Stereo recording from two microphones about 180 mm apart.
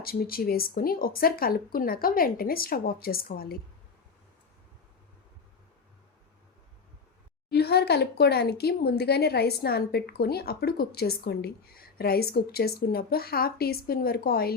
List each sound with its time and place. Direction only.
0.0 s speech: 55° left (ahead or behind)
7.5 s speech: 65° left (ahead or behind)